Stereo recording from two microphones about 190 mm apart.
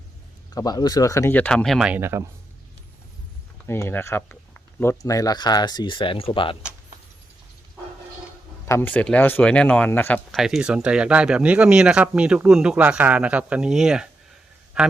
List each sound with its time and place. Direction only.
0.5 s speech: 20° left (ahead or behind); by 2.3 s 15° right (ahead or behind)
3.7 s speech: 10° left (ahead or behind); by 6.6 s 25° left (ahead or behind)
8.6 s speech: 10° left (ahead or behind)
10.4 s speech: 5° right (ahead or behind)